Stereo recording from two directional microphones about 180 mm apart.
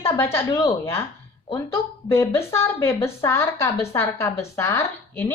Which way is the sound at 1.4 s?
30° left (ahead or behind).